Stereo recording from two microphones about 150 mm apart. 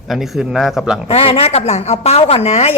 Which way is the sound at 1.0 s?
40° left (ahead or behind).